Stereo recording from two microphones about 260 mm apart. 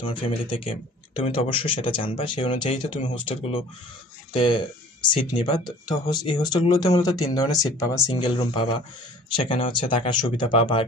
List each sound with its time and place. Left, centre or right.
0.0 s speech: centre
4.3 s speech: centre